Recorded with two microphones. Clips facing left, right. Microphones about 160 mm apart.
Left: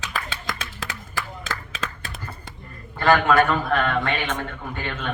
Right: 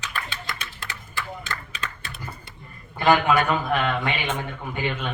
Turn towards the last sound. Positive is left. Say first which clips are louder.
# right 2 dB
turn(degrees=-15)  # may be behind; listen again after turning